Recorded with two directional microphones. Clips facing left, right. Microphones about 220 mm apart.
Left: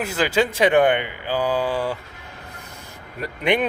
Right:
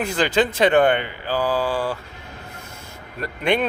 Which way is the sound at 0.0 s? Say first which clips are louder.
Right 1 dB; 5° left (ahead or behind).